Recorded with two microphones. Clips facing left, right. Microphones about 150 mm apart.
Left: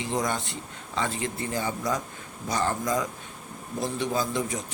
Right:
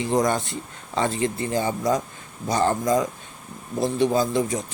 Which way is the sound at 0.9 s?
35° right (ahead or behind).